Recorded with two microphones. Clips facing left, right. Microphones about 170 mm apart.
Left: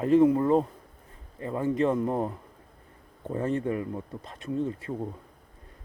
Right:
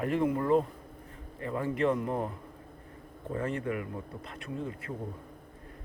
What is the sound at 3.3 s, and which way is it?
Speech, 25° left (ahead or behind).